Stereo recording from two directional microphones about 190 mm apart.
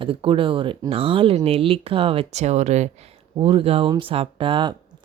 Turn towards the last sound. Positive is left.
turn(degrees=-25)  # may be behind; listen again after turning